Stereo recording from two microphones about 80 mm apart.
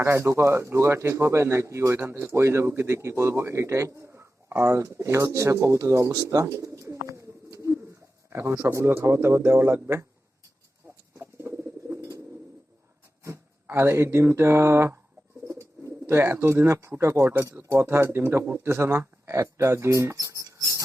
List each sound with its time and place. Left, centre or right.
0.0 s speech: right
11.2 s bird: right
13.2 s speech: right
15.4 s bird: right
17.0 s speech: right